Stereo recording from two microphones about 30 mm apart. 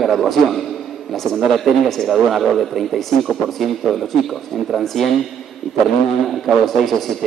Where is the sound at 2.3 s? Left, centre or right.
Centre.